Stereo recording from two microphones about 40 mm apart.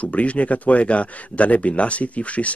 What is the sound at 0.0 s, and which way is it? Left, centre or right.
Speech, left.